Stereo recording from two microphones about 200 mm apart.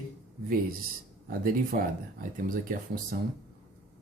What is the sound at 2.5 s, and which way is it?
Speech, 45° right (ahead or behind).